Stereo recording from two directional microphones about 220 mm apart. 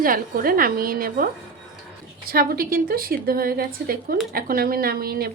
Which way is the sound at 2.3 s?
40° right (ahead or behind).